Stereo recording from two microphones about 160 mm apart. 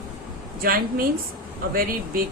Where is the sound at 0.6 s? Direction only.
65° right (ahead or behind).